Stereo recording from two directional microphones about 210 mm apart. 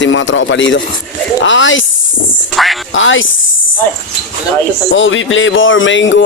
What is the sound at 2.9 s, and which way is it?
Speech, 65° left (ahead or behind).